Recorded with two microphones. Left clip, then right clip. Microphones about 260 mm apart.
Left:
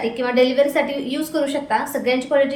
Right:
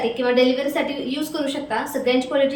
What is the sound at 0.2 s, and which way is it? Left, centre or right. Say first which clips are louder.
A woman's voice: left 3 dB; centre.